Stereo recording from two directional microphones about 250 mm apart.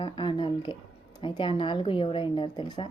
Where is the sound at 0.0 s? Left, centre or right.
Centre.